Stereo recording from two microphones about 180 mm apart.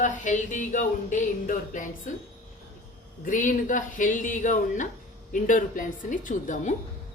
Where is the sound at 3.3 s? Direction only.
45° left (ahead or behind).